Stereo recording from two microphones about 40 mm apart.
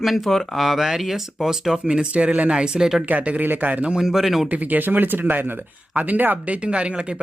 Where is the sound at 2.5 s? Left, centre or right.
Centre.